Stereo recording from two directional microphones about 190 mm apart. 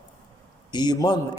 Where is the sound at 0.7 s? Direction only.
20° left (ahead or behind).